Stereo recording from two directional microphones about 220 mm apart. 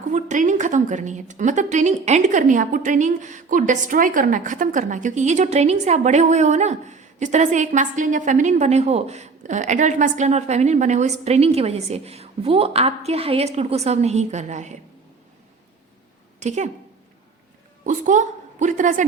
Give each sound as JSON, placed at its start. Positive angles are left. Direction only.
{"t": 0.1, "sound": "a woman's voice", "side_deg": -35}
{"t": 16.4, "sound": "a woman's voice", "side_deg": -30}
{"t": 17.8, "sound": "a woman's voice", "side_deg": -35}